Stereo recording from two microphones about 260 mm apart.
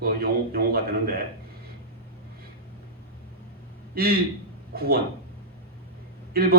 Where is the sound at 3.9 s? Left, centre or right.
Right.